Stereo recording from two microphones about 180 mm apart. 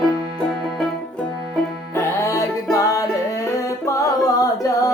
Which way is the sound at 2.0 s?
15° left (ahead or behind).